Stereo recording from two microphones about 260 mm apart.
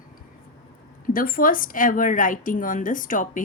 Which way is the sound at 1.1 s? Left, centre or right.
Left.